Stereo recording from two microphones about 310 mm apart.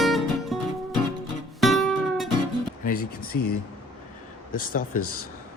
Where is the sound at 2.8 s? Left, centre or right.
Left.